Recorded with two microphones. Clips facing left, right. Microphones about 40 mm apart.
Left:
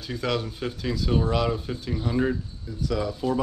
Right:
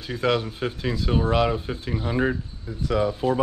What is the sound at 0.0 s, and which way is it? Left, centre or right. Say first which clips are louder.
Speech: right 4 dB; right.